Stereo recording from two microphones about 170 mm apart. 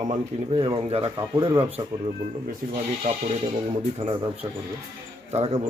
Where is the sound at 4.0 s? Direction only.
35° right (ahead or behind).